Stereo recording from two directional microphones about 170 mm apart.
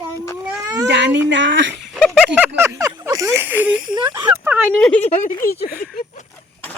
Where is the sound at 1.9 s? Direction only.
Centre (ahead or behind).